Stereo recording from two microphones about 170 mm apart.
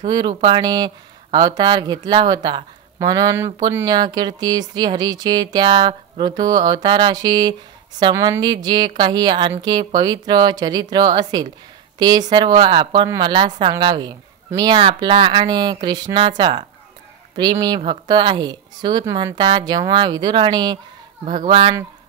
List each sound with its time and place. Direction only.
0.0 s speech: 25° right (ahead or behind)